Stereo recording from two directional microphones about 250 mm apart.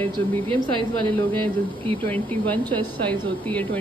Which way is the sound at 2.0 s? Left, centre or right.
Centre.